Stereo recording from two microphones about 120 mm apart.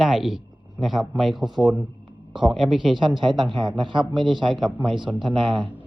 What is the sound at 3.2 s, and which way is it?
Speech, 40° right (ahead or behind).